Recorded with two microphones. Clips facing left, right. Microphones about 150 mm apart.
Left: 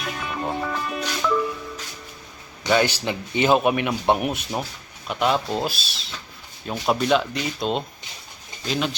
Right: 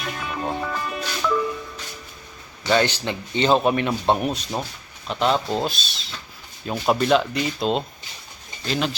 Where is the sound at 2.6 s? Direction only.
10° left (ahead or behind).